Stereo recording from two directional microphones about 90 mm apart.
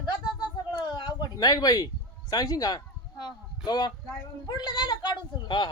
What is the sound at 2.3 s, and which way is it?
Speech, 45° left (ahead or behind).